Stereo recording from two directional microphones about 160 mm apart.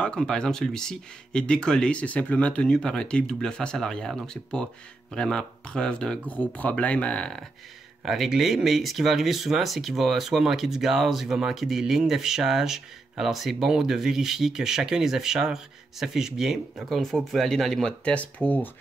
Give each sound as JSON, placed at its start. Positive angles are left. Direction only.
{"t": 0.0, "sound": "speech", "side_deg": 5}